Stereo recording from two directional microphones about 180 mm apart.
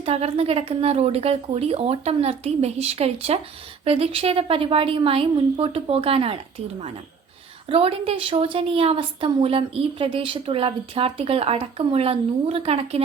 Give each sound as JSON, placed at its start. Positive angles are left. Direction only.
{"t": 0.0, "sound": "a woman's voice", "side_deg": -35}